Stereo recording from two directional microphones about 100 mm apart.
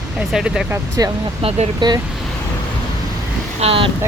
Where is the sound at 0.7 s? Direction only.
35° right (ahead or behind).